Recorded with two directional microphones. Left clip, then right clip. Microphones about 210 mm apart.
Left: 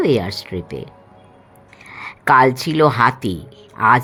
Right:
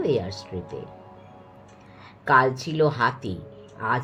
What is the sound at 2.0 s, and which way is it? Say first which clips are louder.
Speech: left 7 dB; 60° left (ahead or behind).